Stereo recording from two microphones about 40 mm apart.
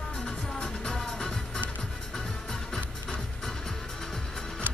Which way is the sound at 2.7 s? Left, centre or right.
Centre.